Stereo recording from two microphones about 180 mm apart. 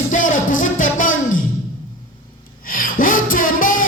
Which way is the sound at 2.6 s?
50° left (ahead or behind).